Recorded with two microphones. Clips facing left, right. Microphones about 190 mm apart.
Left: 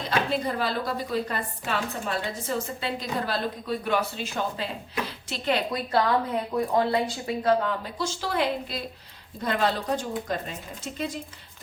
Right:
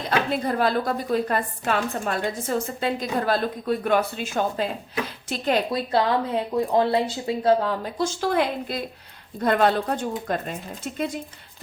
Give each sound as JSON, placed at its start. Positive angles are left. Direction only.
{"t": 0.4, "sound": "a woman's voice", "side_deg": -50}
{"t": 5.7, "sound": "speech", "side_deg": -25}
{"t": 7.9, "sound": "a woman's voice", "side_deg": -50}